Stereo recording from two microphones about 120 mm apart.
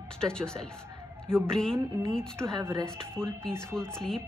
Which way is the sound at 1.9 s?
20° right (ahead or behind).